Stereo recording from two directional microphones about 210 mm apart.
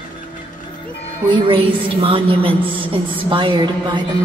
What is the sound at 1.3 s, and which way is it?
A woman's voice, 25° right (ahead or behind).